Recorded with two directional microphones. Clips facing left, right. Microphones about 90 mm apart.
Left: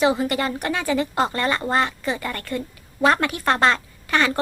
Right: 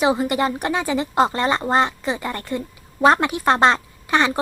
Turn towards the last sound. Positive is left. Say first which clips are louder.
# right 2 dB
turn(degrees=-20)  # may be behind; listen again after turning